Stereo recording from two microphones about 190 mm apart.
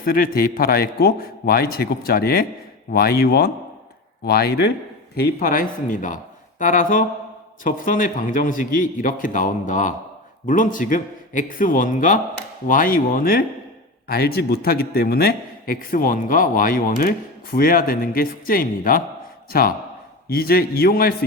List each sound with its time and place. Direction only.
0.0 s a man's voice: 50° left (ahead or behind)